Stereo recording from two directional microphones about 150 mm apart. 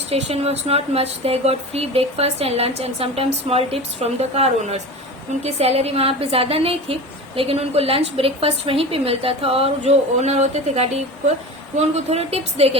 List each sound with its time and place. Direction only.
0.1 s a woman's voice: 45° right (ahead or behind)